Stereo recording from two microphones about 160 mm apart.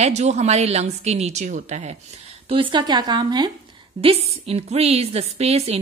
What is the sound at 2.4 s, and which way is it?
Speech, 30° right (ahead or behind).